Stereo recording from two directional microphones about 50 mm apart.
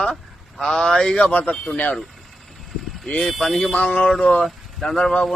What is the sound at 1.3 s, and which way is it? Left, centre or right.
Speech, left.